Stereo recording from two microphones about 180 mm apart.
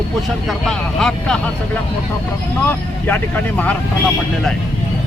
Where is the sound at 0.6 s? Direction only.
Centre (ahead or behind).